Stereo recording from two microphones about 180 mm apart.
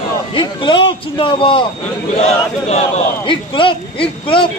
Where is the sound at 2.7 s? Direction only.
35° left (ahead or behind).